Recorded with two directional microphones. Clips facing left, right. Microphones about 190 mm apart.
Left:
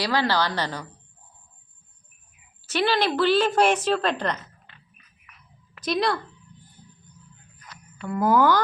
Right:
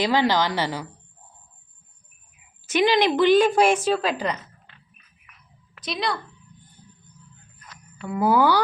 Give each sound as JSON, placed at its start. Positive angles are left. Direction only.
{"t": 0.0, "sound": "a woman's voice", "side_deg": -15}
{"t": 2.6, "sound": "a woman's voice", "side_deg": -15}
{"t": 5.8, "sound": "a woman's voice", "side_deg": 0}
{"t": 8.0, "sound": "a woman's voice", "side_deg": -10}